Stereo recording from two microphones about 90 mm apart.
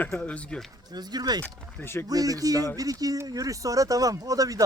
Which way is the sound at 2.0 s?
40° right (ahead or behind).